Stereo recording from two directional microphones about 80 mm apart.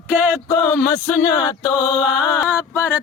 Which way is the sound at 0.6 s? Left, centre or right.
Left.